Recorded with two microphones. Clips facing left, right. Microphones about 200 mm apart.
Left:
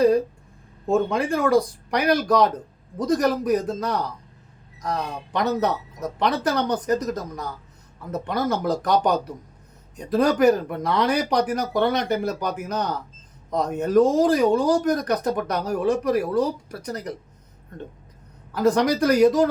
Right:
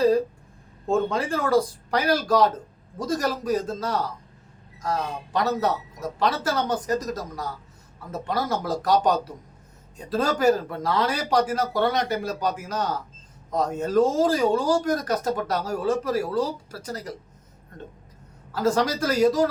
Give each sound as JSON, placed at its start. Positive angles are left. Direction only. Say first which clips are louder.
{"t": 0.9, "sound": "speech", "louder": "left 2 dB", "side_deg": 15}
{"t": 5.4, "sound": "speech", "louder": "left 1 dB", "side_deg": 20}
{"t": 18.5, "sound": "speech", "louder": "left 3 dB", "side_deg": 20}